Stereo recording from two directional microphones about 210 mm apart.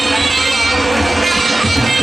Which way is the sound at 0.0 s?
Centre (ahead or behind).